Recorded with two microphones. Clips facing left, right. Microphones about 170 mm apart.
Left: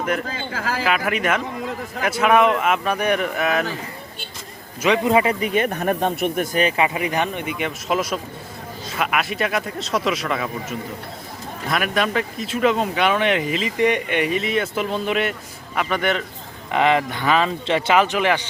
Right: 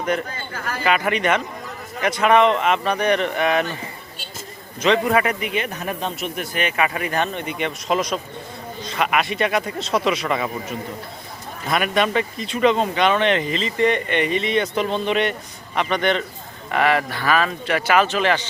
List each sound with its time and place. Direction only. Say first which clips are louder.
0.3 s speech: left 4 dB; 90° left
0.9 s speech: right 3 dB; 5° left (ahead or behind)
5.0 s speech: left 2 dB; 25° left (ahead or behind)
6.8 s speech: left 1 dB; 15° left (ahead or behind)
16.7 s speech: left 1 dB; 20° left (ahead or behind)